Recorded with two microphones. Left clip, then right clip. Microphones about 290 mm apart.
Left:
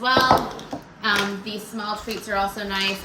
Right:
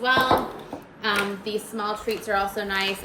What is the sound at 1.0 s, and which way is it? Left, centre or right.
A woman's voice, centre.